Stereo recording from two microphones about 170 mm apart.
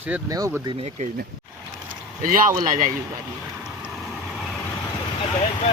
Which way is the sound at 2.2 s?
55° right (ahead or behind).